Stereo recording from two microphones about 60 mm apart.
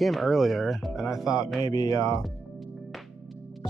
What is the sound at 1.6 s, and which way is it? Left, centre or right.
Speech, left.